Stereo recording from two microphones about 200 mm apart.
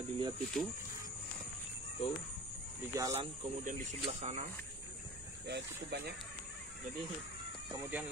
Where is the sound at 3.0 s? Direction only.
15° right (ahead or behind).